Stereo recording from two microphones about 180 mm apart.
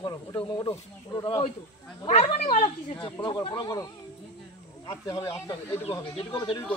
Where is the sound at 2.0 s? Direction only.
30° left (ahead or behind).